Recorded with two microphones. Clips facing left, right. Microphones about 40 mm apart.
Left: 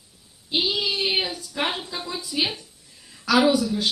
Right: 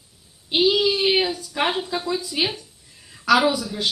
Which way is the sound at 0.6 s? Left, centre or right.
Right.